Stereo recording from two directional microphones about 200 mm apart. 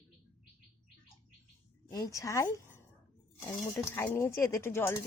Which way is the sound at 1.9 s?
15° left (ahead or behind).